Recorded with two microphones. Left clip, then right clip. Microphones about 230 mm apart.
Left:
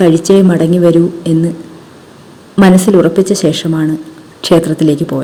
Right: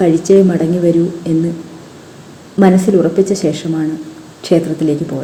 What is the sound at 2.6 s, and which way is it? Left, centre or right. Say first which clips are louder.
A woman's voice: left 3 dB; left.